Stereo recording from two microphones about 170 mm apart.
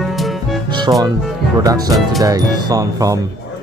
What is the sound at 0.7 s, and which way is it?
Speech, 25° right (ahead or behind).